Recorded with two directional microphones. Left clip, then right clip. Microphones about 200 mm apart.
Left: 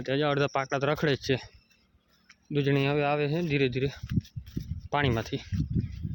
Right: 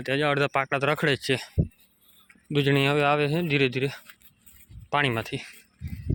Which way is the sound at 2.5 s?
10° right (ahead or behind).